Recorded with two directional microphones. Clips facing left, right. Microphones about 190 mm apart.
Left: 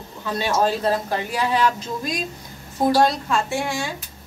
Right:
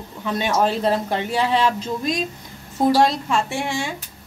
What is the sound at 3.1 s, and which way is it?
Speech, 25° right (ahead or behind).